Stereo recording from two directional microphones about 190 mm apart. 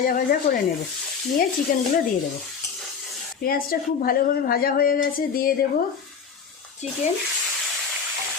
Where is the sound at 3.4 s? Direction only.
50° left (ahead or behind).